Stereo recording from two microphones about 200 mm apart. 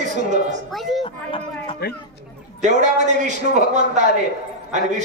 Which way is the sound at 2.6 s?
35° right (ahead or behind).